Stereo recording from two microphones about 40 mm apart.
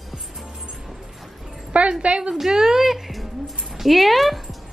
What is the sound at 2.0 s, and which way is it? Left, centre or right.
Speech, right.